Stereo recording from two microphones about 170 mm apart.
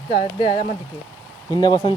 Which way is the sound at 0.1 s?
25° left (ahead or behind).